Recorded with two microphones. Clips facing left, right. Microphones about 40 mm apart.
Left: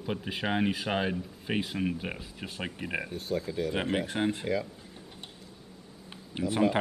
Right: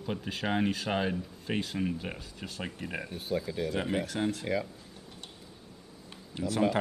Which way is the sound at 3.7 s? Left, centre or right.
Left.